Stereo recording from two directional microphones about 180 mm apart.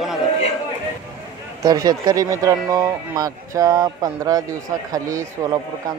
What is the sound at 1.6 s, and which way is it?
Speech, 20° right (ahead or behind).